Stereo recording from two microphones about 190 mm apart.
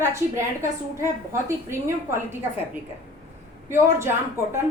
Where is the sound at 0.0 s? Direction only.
15° right (ahead or behind).